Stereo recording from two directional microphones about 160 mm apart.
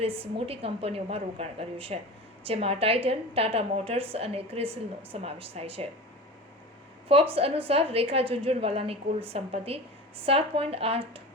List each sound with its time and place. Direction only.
0.0 s a woman's voice: 35° right (ahead or behind)
7.3 s a woman's voice: 35° right (ahead or behind)